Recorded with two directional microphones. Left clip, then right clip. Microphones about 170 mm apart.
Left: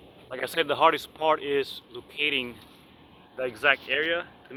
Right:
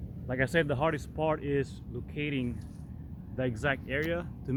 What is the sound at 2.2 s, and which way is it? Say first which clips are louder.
Speech: left 8 dB; 30° left (ahead or behind).